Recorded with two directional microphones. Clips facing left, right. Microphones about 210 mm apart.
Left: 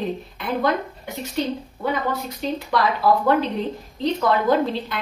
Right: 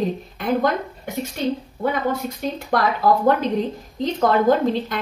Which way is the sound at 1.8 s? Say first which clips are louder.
Right 2 dB; 50° right (ahead or behind).